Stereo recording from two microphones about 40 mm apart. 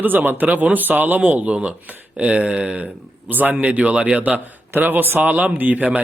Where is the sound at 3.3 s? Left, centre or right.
Right.